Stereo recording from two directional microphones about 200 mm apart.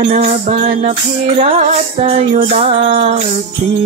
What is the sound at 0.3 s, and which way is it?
Music, 30° right (ahead or behind).